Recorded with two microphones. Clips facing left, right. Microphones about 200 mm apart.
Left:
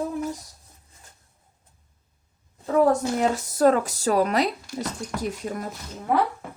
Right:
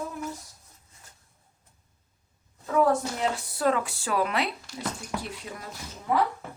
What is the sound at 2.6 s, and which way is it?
A woman's voice, 40° left (ahead or behind).